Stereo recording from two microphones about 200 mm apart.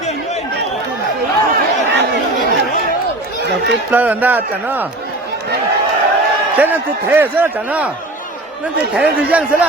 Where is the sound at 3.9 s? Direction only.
10° right (ahead or behind).